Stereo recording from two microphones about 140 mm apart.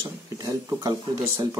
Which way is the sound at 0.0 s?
25° right (ahead or behind).